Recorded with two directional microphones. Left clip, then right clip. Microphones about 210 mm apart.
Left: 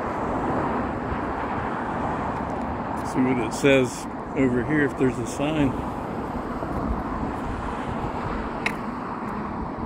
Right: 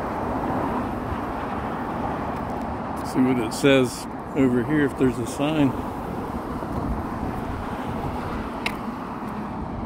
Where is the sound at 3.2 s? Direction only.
25° right (ahead or behind).